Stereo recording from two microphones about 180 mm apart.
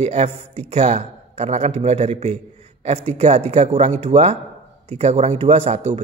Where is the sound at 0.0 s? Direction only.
35° right (ahead or behind).